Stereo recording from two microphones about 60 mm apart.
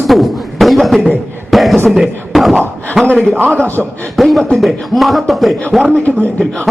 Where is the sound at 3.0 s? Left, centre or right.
Centre.